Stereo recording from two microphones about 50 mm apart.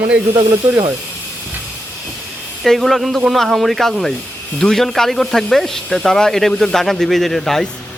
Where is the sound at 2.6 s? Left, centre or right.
Centre.